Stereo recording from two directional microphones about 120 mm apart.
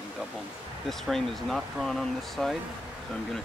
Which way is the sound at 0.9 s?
Centre (ahead or behind).